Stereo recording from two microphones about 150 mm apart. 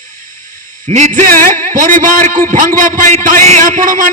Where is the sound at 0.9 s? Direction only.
50° right (ahead or behind).